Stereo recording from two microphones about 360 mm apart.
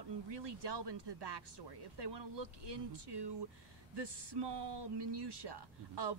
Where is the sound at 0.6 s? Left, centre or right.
Right.